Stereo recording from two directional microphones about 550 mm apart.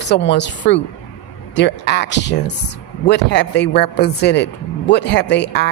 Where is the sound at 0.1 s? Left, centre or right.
Centre.